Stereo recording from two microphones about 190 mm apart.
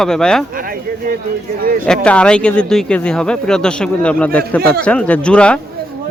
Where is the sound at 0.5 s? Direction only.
50° right (ahead or behind).